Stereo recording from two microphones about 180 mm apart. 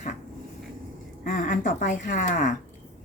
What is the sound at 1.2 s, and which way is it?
A woman's voice, 45° left (ahead or behind).